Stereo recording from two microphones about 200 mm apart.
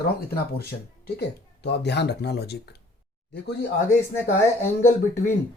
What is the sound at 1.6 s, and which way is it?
Speech, 55° left (ahead or behind).